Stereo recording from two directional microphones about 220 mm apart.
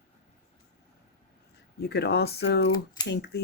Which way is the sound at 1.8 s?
50° left (ahead or behind).